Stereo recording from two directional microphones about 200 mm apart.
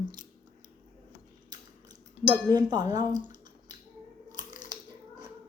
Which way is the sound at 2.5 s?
20° right (ahead or behind).